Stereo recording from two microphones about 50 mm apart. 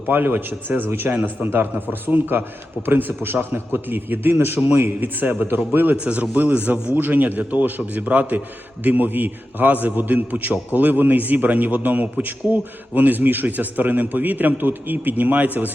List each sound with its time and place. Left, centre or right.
0.1 s a man's voice: right
0.9 s a man's voice: right
1.1 s a man's voice: right